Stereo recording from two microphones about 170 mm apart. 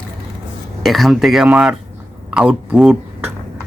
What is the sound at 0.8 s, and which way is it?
Speech, centre (ahead or behind).